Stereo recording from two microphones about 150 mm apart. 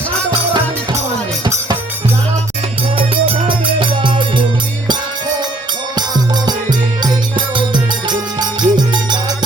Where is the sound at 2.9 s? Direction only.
40° right (ahead or behind).